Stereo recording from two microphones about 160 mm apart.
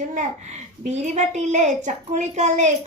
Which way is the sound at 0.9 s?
45° right (ahead or behind).